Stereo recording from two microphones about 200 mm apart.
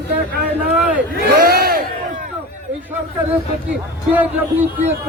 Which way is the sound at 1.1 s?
50° right (ahead or behind).